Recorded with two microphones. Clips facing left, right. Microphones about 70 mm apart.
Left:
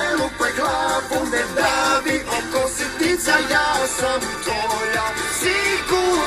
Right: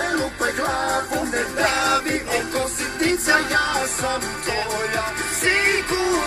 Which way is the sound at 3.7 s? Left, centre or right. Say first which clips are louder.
Left 3 dB; left.